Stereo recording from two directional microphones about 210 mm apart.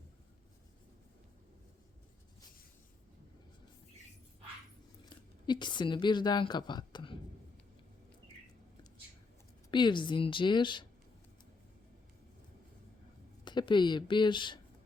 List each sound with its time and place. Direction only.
5.0 s speech: 20° left (ahead or behind)
9.7 s speech: 20° left (ahead or behind)
13.4 s speech: 20° left (ahead or behind)